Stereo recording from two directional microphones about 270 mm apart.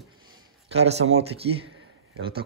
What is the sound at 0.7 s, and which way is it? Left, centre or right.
Speech, right.